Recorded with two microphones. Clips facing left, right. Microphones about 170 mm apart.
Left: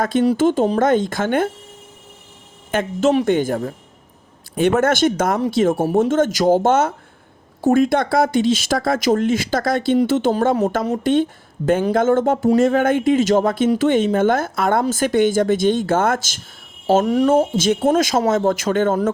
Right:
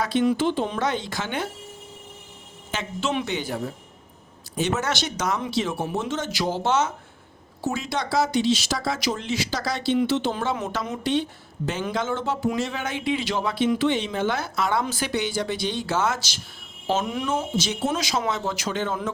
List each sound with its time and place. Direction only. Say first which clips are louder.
0.0 s speech: left 6 dB; 50° left (ahead or behind)
2.7 s speech: left 10 dB; 45° left (ahead or behind)